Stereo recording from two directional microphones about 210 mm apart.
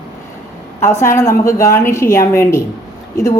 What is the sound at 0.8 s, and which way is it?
A woman's voice, 10° left (ahead or behind).